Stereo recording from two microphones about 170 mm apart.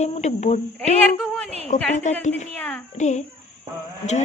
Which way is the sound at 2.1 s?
45° left (ahead or behind).